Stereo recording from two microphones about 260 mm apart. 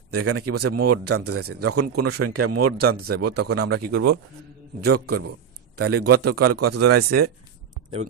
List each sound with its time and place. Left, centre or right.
0.1 s a man's voice: right
1.7 s speech: right
2.1 s speech: right
2.8 s speech: right
5.8 s a man's voice: right